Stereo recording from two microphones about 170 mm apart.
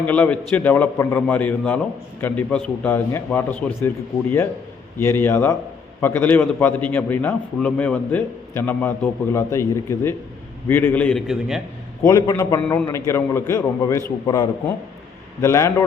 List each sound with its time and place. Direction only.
0.0 s a man's voice: 10° left (ahead or behind)
12.0 s a man's voice: 20° left (ahead or behind)
12.6 s a man's voice: 10° left (ahead or behind)
15.4 s a man's voice: 15° left (ahead or behind)